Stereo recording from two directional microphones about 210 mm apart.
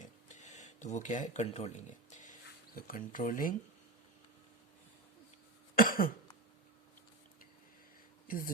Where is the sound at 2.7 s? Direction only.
40° left (ahead or behind).